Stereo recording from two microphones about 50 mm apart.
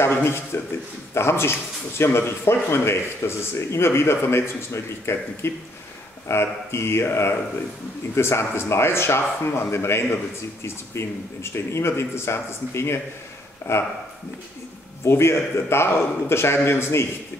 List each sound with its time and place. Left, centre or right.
0.0 s speech: left
8.2 s speech: left
15.0 s speech: left